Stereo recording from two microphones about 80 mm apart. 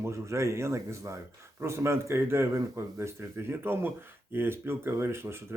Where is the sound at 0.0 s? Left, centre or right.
Right.